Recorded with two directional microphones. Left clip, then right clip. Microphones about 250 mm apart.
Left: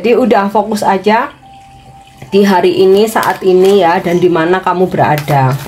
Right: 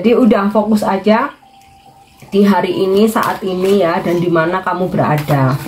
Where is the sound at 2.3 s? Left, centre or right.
Left.